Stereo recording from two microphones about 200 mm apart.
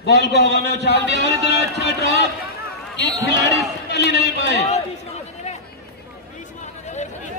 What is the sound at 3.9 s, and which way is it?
Speech, 60° left (ahead or behind).